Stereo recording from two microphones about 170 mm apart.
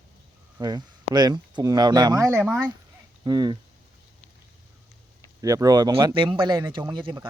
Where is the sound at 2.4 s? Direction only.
5° right (ahead or behind).